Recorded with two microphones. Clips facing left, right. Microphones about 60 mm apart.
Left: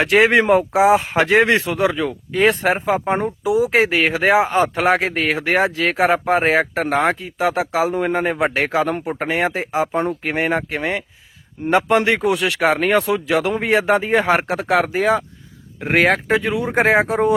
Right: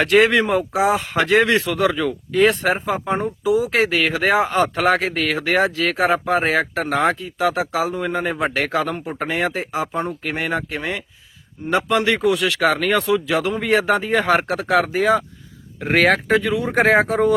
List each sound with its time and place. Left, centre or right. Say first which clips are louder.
0.0 s speech: left 1 dB; left
9.9 s speech: left 4 dB; left
15.8 s speech: even; centre